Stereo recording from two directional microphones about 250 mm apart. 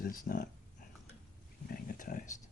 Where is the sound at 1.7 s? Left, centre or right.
Left.